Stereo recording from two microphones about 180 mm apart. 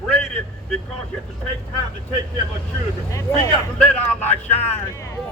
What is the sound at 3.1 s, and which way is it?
Speech, 15° left (ahead or behind).